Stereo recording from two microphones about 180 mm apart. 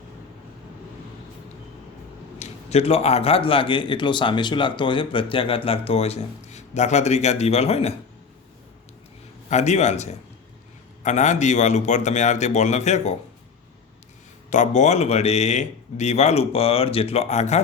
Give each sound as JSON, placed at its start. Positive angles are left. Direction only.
{"t": 2.4, "sound": "speech", "side_deg": 35}
{"t": 9.5, "sound": "speech", "side_deg": 40}
{"t": 14.5, "sound": "speech", "side_deg": 40}